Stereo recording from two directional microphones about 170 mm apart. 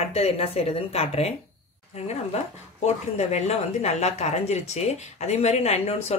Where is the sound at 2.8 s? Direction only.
40° left (ahead or behind).